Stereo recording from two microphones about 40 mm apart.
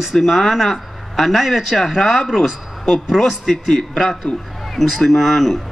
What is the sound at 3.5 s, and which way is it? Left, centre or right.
Speech, centre.